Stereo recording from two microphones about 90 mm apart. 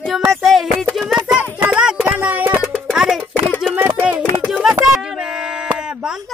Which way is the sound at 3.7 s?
15° right (ahead or behind).